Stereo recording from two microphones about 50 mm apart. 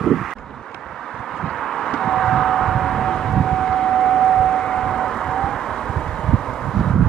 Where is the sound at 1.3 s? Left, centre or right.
Centre.